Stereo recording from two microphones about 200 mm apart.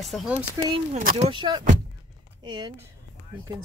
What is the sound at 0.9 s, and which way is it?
Speech, 35° right (ahead or behind).